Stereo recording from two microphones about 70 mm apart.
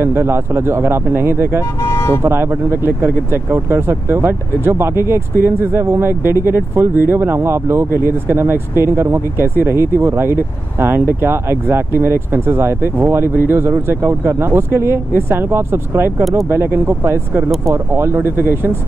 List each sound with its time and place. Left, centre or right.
0.0 s speech: right
1.9 s vehicle: left
2.2 s speech: right